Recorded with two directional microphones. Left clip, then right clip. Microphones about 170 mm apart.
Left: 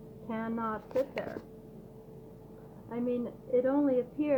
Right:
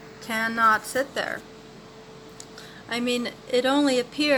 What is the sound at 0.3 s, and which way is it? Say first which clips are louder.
Speech: right 12 dB; 10° right (ahead or behind).